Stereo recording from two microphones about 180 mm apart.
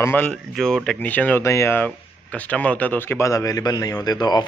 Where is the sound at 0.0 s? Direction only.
10° left (ahead or behind).